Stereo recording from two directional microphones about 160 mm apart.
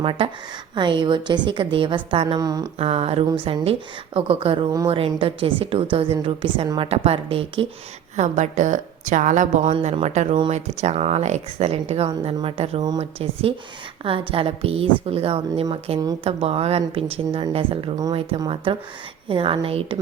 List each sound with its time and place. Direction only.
0.0 s a woman's voice: 35° right (ahead or behind)
2.7 s a woman's voice: 40° right (ahead or behind)
8.1 s a woman's voice: 50° right (ahead or behind)
9.7 s a woman's voice: 40° right (ahead or behind)